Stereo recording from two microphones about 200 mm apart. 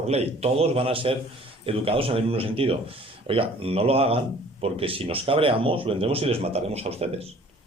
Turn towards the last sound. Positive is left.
turn(degrees=-30)  # may be behind; listen again after turning